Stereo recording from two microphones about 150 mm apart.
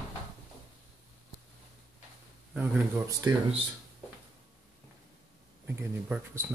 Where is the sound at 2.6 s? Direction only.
20° right (ahead or behind).